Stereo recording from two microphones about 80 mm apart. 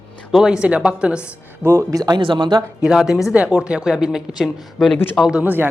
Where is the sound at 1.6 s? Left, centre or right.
Right.